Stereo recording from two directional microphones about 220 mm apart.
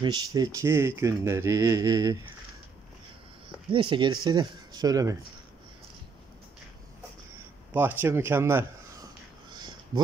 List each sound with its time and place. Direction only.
0.0 s speech: 20° right (ahead or behind)
3.7 s speech: 20° right (ahead or behind)
7.7 s speech: 10° right (ahead or behind)
9.5 s a sound: 20° right (ahead or behind)